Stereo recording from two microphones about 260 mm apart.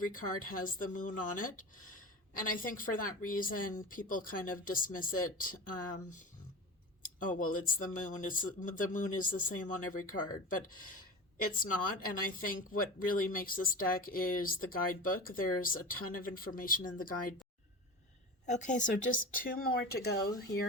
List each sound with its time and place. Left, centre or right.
0.0 s speech: left
18.4 s speech: left